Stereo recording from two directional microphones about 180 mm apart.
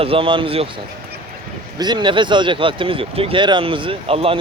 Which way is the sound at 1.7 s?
25° right (ahead or behind).